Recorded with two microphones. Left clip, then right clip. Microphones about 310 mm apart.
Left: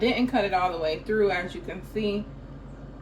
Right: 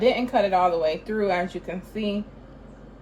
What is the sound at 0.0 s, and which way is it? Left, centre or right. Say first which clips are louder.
Speech: right 4 dB; right.